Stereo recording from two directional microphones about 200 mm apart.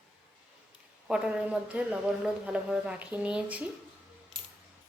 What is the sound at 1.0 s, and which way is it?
Speech, 5° right (ahead or behind).